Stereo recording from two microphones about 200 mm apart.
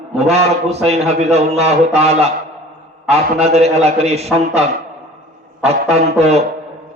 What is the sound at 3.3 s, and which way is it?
A man's voice, 30° right (ahead or behind).